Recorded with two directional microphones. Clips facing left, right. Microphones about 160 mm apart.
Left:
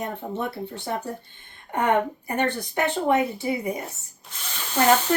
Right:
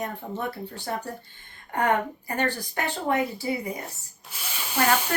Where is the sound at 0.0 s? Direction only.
20° left (ahead or behind).